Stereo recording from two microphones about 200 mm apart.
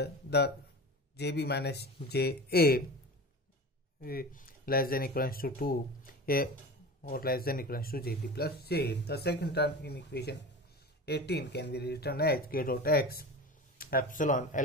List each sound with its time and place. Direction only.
0.0 s speech: 55° left (ahead or behind)
4.0 s speech: 50° left (ahead or behind)